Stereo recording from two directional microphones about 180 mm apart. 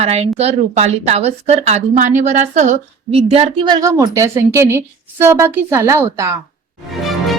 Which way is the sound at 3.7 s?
20° right (ahead or behind).